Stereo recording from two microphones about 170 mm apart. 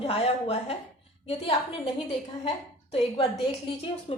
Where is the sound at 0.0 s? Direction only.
35° left (ahead or behind).